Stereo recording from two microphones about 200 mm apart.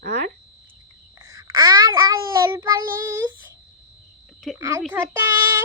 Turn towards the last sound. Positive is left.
turn(degrees=-15)  # may be behind; listen again after turning